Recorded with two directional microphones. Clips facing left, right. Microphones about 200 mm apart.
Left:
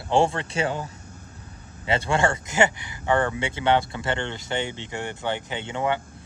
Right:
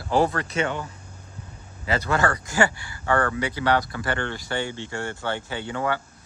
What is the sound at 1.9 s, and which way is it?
Speech, 25° left (ahead or behind).